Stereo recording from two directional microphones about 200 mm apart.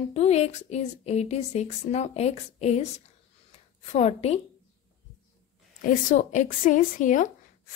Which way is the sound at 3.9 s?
30° left (ahead or behind).